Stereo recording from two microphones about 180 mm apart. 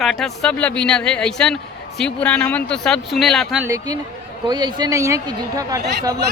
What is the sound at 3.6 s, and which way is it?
Speech, 20° right (ahead or behind).